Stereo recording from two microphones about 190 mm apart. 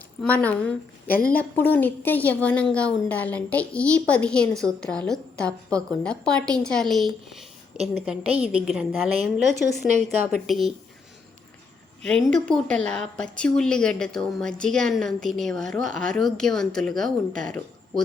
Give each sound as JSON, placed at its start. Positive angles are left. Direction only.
{"t": 0.2, "sound": "a woman's voice", "side_deg": 10}
{"t": 9.9, "sound": "a woman's voice", "side_deg": -40}
{"t": 10.4, "sound": "a woman's voice", "side_deg": 0}
{"t": 12.0, "sound": "a woman's voice", "side_deg": 5}